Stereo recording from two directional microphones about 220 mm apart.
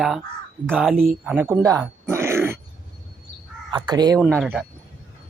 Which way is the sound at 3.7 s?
20° right (ahead or behind).